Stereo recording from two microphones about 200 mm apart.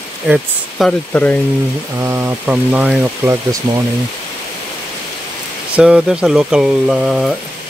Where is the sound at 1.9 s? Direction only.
15° right (ahead or behind).